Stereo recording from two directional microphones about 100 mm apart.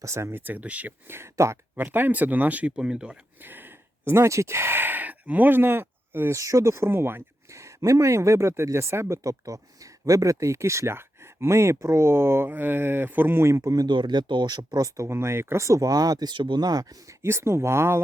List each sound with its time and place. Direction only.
0.0 s speech: 25° right (ahead or behind); by 3.2 s 10° right (ahead or behind)
3.4 s speech: 20° right (ahead or behind)
13.8 s speech: 50° right (ahead or behind)
17.2 s speech: 25° right (ahead or behind)